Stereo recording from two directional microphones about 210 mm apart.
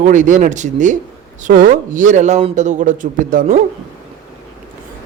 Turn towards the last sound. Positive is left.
turn(degrees=-40)  # may be behind; listen again after turning